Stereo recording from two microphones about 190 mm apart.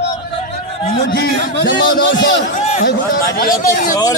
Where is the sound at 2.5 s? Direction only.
40° left (ahead or behind).